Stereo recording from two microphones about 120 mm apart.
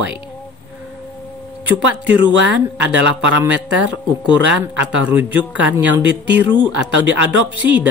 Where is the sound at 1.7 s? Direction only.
15° right (ahead or behind).